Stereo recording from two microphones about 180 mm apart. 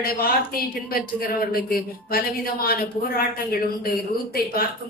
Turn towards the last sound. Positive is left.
turn(degrees=55)  # may be behind; listen again after turning